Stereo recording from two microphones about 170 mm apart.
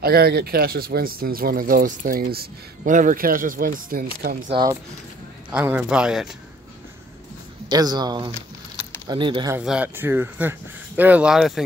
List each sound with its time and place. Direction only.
0.0 s speech: 65° right (ahead or behind)
4.5 s speech: 25° right (ahead or behind)
5.5 s speech: 10° right (ahead or behind)
7.7 s speech: 25° right (ahead or behind)
9.5 s speech: 5° right (ahead or behind)